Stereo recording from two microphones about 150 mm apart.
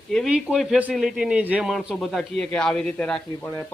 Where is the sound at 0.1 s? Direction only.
Centre (ahead or behind).